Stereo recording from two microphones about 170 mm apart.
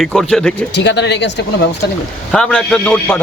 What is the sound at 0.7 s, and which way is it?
Speech, 90° left.